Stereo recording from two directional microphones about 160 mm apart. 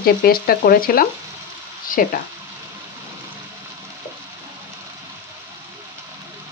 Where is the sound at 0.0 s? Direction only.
70° left (ahead or behind).